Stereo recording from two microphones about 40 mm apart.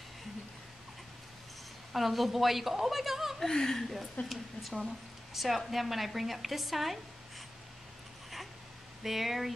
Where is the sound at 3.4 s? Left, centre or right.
Centre.